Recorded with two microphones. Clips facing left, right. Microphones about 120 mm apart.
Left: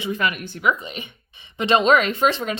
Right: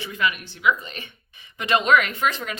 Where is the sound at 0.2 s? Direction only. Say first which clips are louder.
Left 1 dB; 50° left (ahead or behind).